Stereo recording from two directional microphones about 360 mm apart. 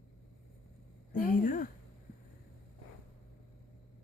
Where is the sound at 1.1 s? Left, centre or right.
Left.